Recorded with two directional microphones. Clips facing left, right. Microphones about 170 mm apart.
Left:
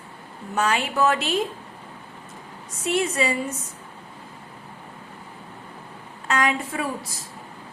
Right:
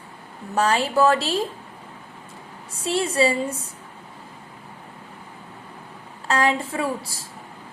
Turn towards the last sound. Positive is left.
turn(degrees=-30)  # may be behind; listen again after turning